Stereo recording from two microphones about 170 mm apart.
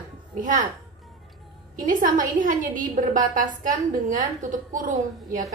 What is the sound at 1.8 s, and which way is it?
A woman's voice, 50° right (ahead or behind).